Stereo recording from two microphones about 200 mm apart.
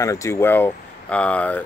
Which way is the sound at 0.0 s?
15° left (ahead or behind).